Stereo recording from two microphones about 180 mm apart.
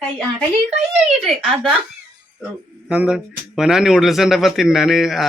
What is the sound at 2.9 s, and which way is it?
A man's voice, 5° right (ahead or behind).